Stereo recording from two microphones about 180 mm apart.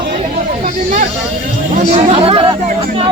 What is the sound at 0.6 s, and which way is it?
Speech, 40° right (ahead or behind).